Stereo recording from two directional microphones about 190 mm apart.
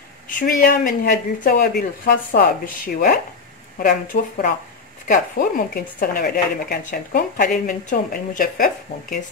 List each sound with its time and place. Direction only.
0.3 s speech: 45° left (ahead or behind)